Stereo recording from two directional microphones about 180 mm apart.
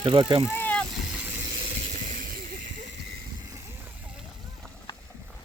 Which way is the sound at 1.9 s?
45° right (ahead or behind).